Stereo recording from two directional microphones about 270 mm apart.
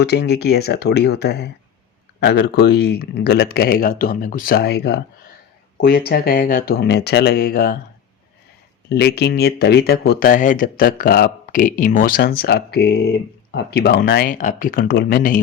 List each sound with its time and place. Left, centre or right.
0.0 s speech: left
8.9 s speech: left